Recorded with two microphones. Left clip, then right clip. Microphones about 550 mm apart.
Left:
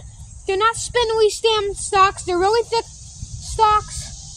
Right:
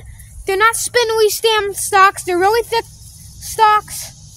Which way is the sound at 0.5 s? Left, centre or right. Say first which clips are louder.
Right 5 dB; right.